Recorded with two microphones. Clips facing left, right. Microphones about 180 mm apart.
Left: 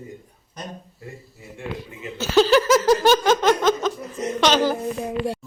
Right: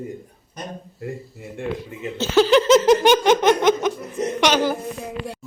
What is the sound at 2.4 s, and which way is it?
Laughter, 20° right (ahead or behind).